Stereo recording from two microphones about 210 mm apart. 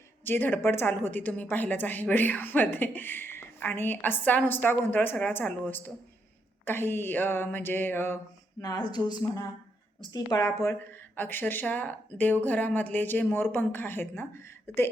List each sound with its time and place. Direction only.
0.3 s a woman's voice: 10° left (ahead or behind)